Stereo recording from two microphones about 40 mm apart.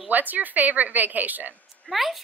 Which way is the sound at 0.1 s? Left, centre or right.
Right.